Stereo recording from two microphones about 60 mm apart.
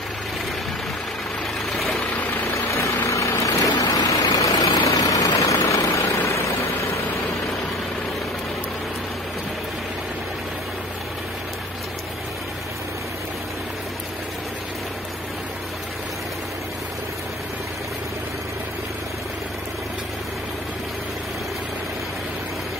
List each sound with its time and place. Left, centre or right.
1.8 s vehicle: centre
2.5 s vehicle: left